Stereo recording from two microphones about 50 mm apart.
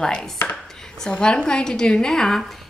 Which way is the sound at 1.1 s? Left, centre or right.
Centre.